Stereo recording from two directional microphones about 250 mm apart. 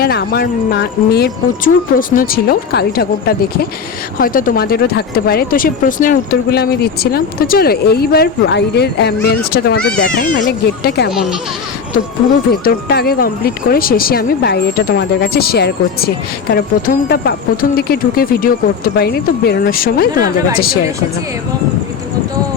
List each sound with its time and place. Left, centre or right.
0.0 s speech: left
12.5 s speech: left